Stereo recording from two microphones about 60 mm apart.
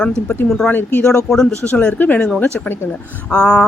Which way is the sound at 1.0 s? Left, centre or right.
Centre.